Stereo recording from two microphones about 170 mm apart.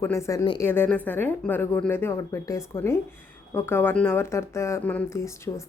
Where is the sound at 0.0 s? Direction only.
15° left (ahead or behind).